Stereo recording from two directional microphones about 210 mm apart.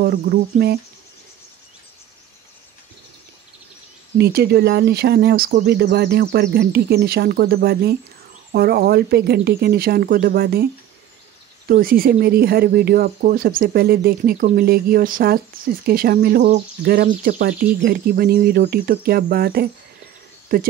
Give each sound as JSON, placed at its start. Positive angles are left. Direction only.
{"t": 0.0, "sound": "speech", "side_deg": -45}
{"t": 4.2, "sound": "speech", "side_deg": -50}